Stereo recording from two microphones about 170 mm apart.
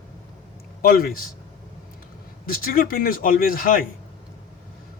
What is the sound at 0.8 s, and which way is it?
Speech, 60° left (ahead or behind).